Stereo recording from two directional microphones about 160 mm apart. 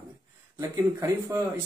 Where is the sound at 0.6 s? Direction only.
20° right (ahead or behind).